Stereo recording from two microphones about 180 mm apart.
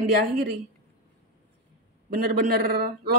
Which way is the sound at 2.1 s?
55° right (ahead or behind).